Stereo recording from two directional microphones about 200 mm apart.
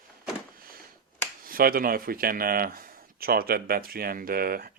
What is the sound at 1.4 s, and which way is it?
Speech, 45° right (ahead or behind).